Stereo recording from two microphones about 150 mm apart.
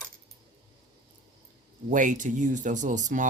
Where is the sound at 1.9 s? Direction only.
60° right (ahead or behind).